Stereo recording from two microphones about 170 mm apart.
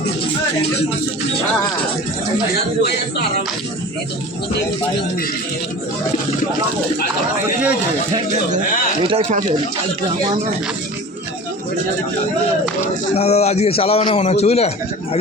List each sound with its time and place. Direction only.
9.0 s speech: 35° right (ahead or behind)
13.1 s a man's voice: 40° left (ahead or behind)